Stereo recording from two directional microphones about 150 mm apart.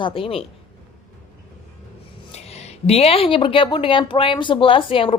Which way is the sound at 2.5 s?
45° left (ahead or behind).